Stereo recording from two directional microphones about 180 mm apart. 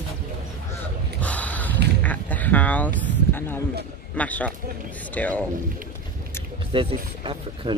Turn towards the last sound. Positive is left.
turn(degrees=-30)  # may be behind; listen again after turning